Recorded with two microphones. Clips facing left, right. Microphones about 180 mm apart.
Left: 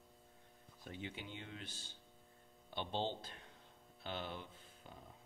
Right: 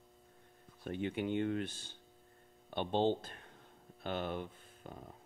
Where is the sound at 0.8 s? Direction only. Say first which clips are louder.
Right 12 dB; 60° right (ahead or behind).